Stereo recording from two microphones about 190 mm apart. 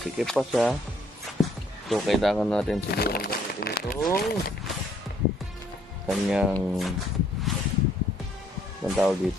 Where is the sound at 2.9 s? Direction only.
55° left (ahead or behind).